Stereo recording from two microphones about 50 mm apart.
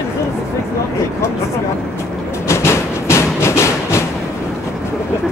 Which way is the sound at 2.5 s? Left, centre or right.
Left.